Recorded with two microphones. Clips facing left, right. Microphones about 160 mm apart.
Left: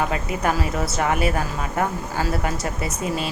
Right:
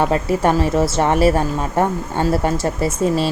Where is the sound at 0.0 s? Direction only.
30° right (ahead or behind).